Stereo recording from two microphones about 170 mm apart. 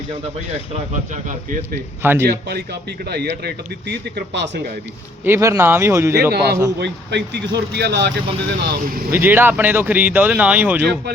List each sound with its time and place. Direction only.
1.1 s speech: 45° right (ahead or behind)
2.0 s speech: 15° right (ahead or behind)
3.1 s speech: 75° right (ahead or behind)
5.2 s speech: 15° right (ahead or behind)
6.3 s speech: 70° right (ahead or behind)
9.1 s speech: 10° right (ahead or behind)